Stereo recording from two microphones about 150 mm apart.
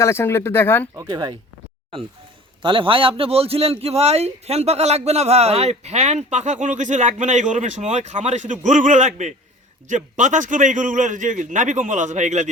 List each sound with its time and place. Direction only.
0.0 s speech: 15° left (ahead or behind)
0.9 s speech: 25° right (ahead or behind)
2.6 s a man's voice: 35° right (ahead or behind); by 12.5 s 50° right (ahead or behind)